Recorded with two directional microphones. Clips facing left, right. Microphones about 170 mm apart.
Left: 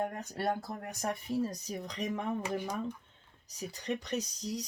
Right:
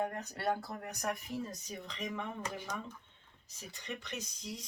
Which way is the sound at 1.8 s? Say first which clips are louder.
Left 4 dB; 40° left (ahead or behind).